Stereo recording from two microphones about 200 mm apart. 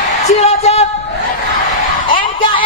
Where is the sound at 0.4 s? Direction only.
30° left (ahead or behind).